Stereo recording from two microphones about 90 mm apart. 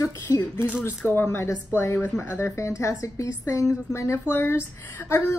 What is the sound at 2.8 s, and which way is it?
A woman's voice, 35° left (ahead or behind).